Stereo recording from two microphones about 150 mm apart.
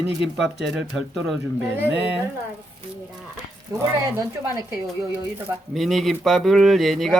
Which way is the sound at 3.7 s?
15° right (ahead or behind).